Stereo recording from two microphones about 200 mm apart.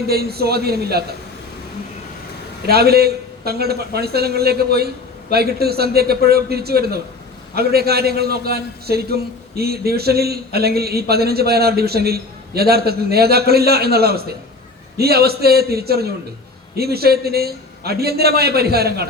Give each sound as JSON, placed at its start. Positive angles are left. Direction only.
{"t": 0.1, "sound": "a man's voice", "side_deg": -50}
{"t": 2.6, "sound": "a man's voice", "side_deg": -50}